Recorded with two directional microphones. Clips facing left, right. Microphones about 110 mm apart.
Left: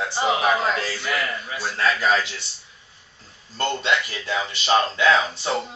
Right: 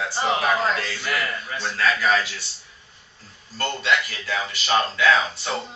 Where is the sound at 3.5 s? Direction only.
25° left (ahead or behind).